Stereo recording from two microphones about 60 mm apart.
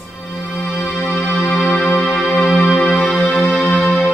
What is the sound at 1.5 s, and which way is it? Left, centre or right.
Music, centre.